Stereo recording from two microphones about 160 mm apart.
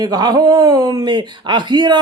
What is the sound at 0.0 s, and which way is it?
Speech, 25° right (ahead or behind).